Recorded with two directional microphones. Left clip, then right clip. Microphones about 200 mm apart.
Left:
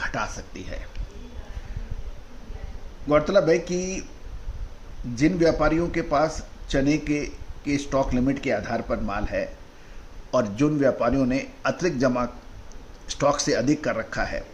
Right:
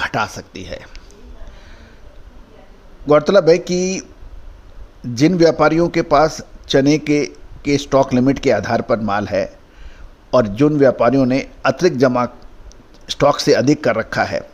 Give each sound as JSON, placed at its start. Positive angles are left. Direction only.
{"t": 0.0, "sound": "a man's voice", "side_deg": -50}
{"t": 3.1, "sound": "a man's voice", "side_deg": -50}
{"t": 5.1, "sound": "a man's voice", "side_deg": -50}
{"t": 10.3, "sound": "a man's voice", "side_deg": -40}